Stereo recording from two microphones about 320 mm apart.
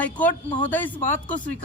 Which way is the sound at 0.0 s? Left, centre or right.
Centre.